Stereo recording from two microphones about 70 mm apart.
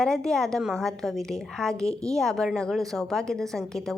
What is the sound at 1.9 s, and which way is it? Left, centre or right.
Speech, right.